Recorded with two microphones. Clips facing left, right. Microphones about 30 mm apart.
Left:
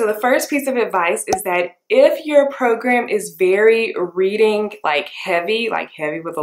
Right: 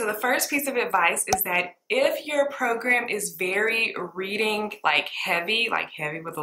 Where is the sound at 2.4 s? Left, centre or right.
Centre.